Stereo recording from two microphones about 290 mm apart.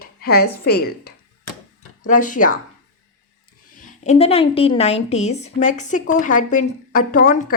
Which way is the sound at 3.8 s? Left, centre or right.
Left.